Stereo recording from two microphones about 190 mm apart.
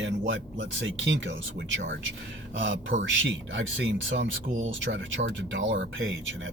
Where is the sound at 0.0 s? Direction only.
80° right.